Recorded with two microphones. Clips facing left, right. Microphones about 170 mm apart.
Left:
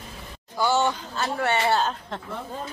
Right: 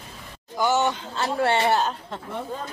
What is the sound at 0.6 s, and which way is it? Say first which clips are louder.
Speech: right 1 dB; 15° right (ahead or behind).